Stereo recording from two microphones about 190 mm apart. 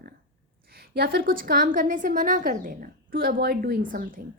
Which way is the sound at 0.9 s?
55° right (ahead or behind).